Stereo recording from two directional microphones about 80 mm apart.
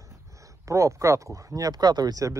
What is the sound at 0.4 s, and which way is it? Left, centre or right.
Speech, right.